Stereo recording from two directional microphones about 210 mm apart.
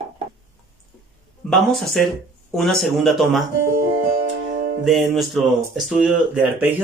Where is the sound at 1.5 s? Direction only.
Centre (ahead or behind).